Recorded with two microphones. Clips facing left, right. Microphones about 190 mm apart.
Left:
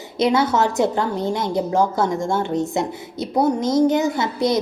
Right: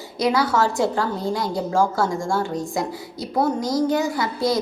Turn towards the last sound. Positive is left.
turn(degrees=20)  # may be behind; listen again after turning